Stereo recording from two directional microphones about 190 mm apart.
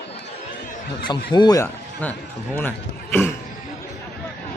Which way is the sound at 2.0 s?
10° left (ahead or behind).